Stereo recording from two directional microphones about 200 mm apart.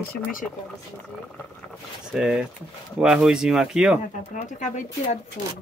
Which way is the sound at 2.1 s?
5° right (ahead or behind).